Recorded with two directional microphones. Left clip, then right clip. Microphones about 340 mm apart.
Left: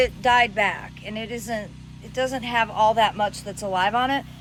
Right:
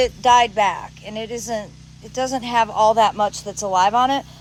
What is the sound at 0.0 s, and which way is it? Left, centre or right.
Speech, centre.